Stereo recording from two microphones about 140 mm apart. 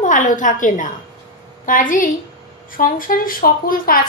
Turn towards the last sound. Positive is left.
turn(degrees=90)